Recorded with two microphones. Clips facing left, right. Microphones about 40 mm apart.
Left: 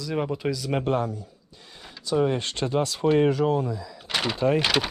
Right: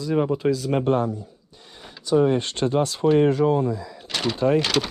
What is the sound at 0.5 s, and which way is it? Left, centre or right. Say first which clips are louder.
Speech: right 4 dB; right.